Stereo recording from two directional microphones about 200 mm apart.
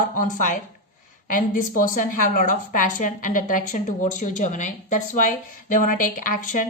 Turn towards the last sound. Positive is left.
turn(degrees=40)  # may be behind; listen again after turning